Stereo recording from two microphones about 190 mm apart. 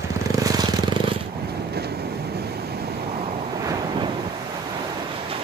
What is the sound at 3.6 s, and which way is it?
Waves, 20° right (ahead or behind).